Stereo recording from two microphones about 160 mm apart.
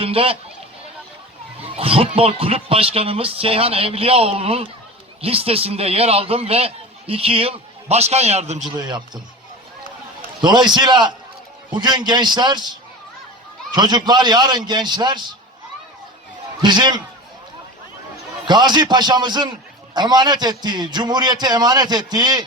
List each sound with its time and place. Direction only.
0.0 s a man's voice: 35° right (ahead or behind)
1.6 s a man's voice: 35° right (ahead or behind)
8.7 s a man's voice: 25° right (ahead or behind)
10.4 s a man's voice: 25° right (ahead or behind)
13.7 s a man's voice: 25° right (ahead or behind)
16.6 s a man's voice: 25° right (ahead or behind)
18.4 s a man's voice: 25° right (ahead or behind)